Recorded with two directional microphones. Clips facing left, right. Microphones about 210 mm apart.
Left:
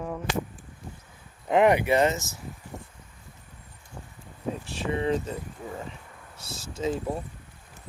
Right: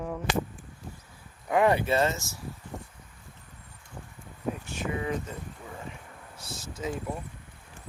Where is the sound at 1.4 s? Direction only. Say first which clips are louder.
Left 3 dB; 20° left (ahead or behind).